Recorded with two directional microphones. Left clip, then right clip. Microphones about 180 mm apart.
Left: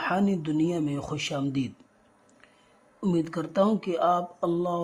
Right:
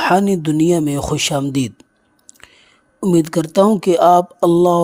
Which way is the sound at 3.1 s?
50° right (ahead or behind).